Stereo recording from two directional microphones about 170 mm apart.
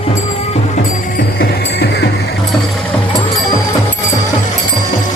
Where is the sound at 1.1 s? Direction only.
70° left (ahead or behind).